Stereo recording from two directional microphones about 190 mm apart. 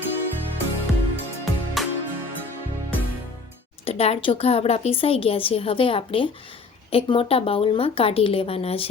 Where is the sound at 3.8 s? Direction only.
30° left (ahead or behind).